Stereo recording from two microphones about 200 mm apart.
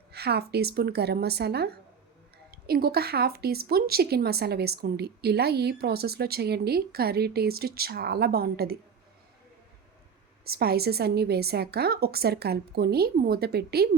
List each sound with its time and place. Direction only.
0.1 s a woman's voice: 55° right (ahead or behind)
10.4 s a woman's voice: 50° right (ahead or behind)